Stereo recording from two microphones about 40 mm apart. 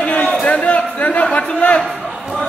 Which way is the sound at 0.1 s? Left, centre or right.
Left.